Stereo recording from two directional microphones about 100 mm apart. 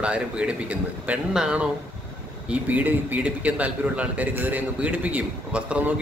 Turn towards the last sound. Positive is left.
turn(degrees=-15)  # may be behind; listen again after turning